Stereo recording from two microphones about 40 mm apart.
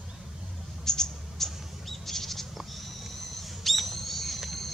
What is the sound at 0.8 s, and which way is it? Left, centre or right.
Mouse, centre.